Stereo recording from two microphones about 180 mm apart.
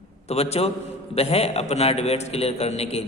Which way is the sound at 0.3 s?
35° left (ahead or behind).